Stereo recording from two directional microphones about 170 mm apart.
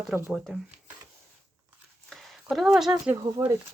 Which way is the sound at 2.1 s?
Centre (ahead or behind).